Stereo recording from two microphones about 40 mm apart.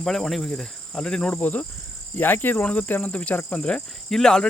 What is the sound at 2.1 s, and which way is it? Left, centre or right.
Speech, left.